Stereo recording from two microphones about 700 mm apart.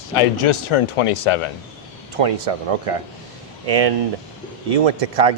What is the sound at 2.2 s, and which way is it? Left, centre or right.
Speech, right.